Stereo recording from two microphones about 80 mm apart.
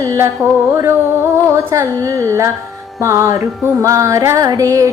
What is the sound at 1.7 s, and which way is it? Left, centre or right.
Music, right.